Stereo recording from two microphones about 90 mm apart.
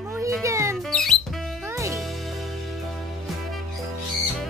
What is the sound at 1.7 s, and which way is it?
Music, 35° right (ahead or behind).